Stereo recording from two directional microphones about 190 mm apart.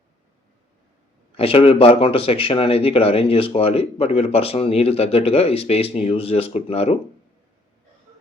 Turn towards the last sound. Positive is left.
turn(degrees=30)  # may be behind; listen again after turning